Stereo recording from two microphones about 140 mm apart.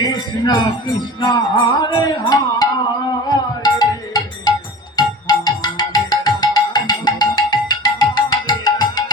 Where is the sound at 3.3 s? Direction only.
30° left (ahead or behind).